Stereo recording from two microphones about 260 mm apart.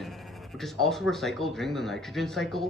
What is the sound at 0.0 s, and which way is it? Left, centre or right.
Speech, centre.